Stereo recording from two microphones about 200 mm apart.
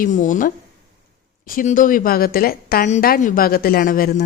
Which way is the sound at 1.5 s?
40° left (ahead or behind).